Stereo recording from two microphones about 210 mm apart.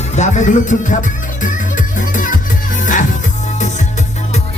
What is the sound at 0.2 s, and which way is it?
Music, 35° left (ahead or behind).